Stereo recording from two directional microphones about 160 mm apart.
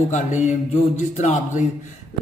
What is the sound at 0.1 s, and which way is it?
Speech, 50° left (ahead or behind).